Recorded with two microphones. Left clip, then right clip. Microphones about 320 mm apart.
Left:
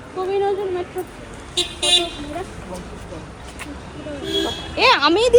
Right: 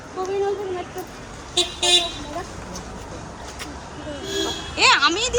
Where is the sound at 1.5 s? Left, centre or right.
Right.